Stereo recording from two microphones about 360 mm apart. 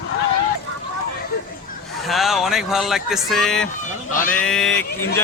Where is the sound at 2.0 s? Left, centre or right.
Centre.